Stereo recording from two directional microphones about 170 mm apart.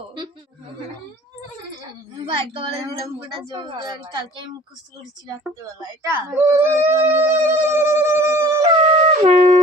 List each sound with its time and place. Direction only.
2.2 s a woman's voice: 30° right (ahead or behind)
6.0 s speech: 10° right (ahead or behind)
7.1 s a sound: 15° right (ahead or behind)
9.0 s shofar: 40° right (ahead or behind)